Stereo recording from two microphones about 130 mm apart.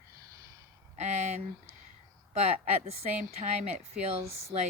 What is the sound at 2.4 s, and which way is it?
Speech, 55° right (ahead or behind).